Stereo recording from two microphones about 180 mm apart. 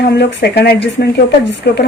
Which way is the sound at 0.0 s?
75° left (ahead or behind).